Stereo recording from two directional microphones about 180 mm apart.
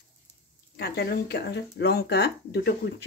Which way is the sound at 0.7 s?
65° left (ahead or behind).